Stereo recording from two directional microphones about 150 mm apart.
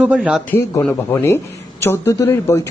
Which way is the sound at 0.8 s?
20° left (ahead or behind).